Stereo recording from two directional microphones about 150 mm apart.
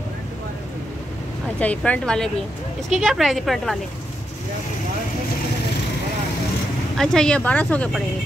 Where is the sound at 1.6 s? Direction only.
10° left (ahead or behind).